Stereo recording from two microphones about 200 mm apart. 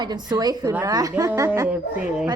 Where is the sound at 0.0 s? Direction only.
20° right (ahead or behind).